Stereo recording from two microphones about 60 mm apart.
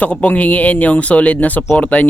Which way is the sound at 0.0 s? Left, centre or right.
Left.